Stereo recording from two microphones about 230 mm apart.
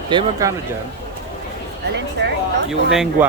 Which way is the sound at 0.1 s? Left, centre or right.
Centre.